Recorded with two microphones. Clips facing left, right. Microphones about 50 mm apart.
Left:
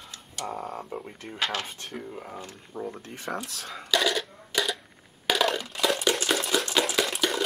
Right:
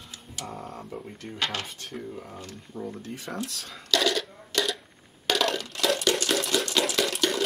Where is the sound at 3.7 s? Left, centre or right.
Centre.